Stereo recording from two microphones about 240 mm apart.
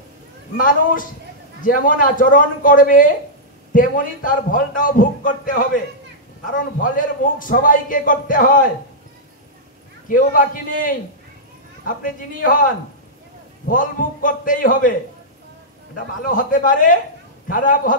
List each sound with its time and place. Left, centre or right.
0.6 s a man's voice: left
10.0 s a man's voice: left
16.3 s a man's voice: left